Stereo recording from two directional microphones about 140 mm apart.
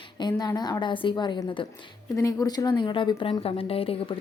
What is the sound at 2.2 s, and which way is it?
A woman's voice, 25° left (ahead or behind).